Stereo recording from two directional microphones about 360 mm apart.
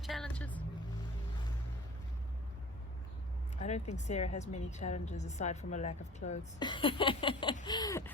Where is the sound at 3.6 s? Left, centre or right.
Centre.